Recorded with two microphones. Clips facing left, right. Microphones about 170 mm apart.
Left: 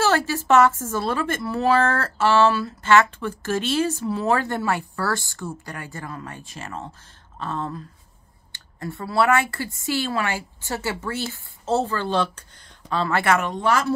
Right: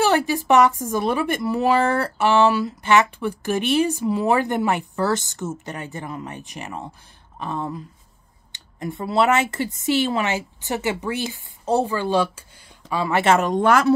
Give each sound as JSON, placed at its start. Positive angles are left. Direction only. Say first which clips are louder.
{"t": 0.0, "sound": "speech", "louder": "right 2 dB", "side_deg": -15}
{"t": 13.6, "sound": "speech", "louder": "right 5 dB", "side_deg": -55}